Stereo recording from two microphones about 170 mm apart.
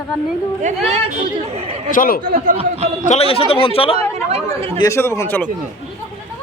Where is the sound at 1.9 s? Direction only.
55° left (ahead or behind).